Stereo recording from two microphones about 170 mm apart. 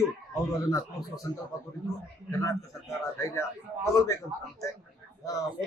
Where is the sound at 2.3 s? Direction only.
20° left (ahead or behind).